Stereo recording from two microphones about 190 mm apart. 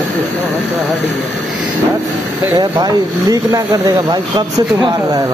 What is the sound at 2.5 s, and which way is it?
Speech, 20° right (ahead or behind).